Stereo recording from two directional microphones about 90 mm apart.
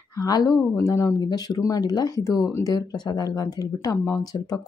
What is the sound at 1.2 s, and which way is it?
Speech, 45° left (ahead or behind).